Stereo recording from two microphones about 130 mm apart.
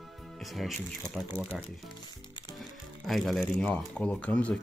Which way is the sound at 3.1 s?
Centre (ahead or behind).